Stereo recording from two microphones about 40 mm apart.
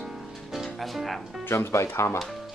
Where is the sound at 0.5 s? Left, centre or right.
Centre.